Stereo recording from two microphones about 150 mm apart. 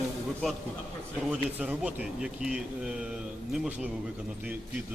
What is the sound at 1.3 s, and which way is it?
Speech, 5° right (ahead or behind).